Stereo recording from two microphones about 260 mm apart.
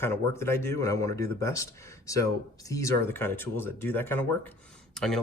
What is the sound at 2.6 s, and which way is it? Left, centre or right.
Speech, centre.